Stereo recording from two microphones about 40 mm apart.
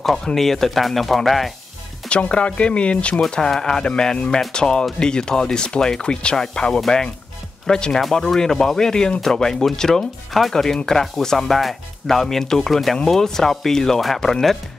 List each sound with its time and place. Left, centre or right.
0.2 s speech: centre
2.0 s speech: left
3.2 s speech: centre